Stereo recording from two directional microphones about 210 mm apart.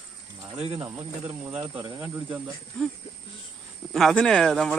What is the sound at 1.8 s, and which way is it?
Speech, 15° right (ahead or behind).